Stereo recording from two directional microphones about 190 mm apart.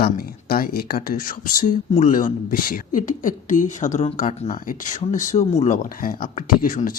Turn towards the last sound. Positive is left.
turn(degrees=50)  # may be behind; listen again after turning